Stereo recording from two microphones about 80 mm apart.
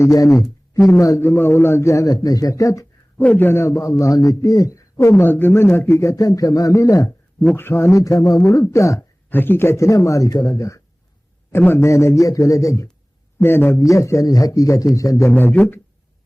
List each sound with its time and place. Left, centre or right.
0.0 s a man's voice: left
1.2 s a man's voice: left
3.2 s a man's voice: left
7.5 s a man's voice: left
9.0 s a man's voice: left
13.4 s speech: left
13.7 s a man's voice: left
15.3 s speech: left